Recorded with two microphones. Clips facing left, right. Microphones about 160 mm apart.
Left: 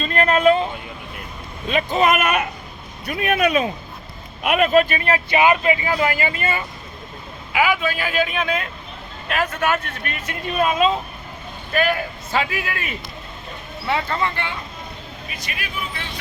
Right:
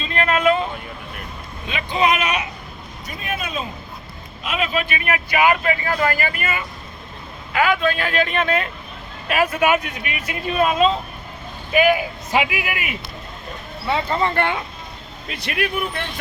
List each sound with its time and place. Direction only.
0.0 s a sound: 40° left (ahead or behind)
1.6 s speech: 40° left (ahead or behind)
3.1 s speech: 65° left (ahead or behind)
4.4 s speech: 55° left (ahead or behind); by 6.6 s 25° left (ahead or behind)
7.5 s a man's voice: 10° left (ahead or behind); by 10.5 s 10° right (ahead or behind)
10.5 s a man's voice: centre (ahead or behind)
14.3 s speech: 55° right (ahead or behind)